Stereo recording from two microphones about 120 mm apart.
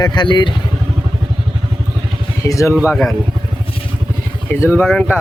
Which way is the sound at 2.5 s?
25° left (ahead or behind).